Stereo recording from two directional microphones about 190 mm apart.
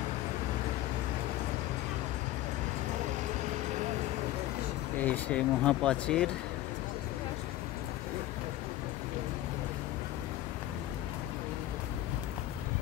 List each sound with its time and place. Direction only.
5.0 s speech: 5° left (ahead or behind)